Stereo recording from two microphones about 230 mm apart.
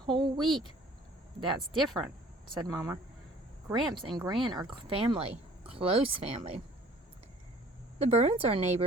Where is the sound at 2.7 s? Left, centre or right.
Centre.